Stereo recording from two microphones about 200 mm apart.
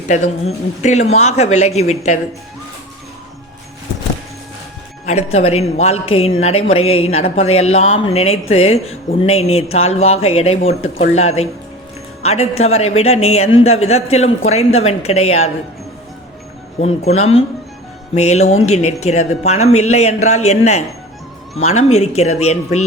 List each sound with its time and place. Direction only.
0.1 s speech: 35° left (ahead or behind)
5.0 s speech: 30° left (ahead or behind)
16.8 s speech: 30° left (ahead or behind)